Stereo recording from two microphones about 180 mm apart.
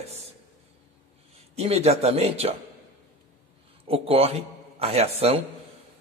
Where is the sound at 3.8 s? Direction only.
30° right (ahead or behind).